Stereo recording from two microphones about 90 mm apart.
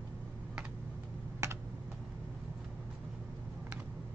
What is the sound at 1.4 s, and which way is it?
Computer keyboard, 30° right (ahead or behind).